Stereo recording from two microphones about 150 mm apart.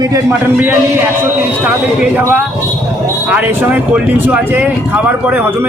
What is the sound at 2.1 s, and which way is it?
Speech, 10° right (ahead or behind).